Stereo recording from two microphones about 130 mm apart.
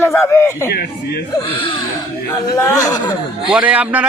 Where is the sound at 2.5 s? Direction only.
25° left (ahead or behind).